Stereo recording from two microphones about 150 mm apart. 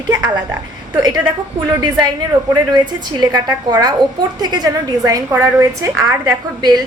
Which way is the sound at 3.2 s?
25° right (ahead or behind).